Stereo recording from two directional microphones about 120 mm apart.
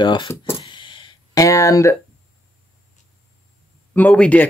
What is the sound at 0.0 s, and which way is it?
Speech, 40° left (ahead or behind).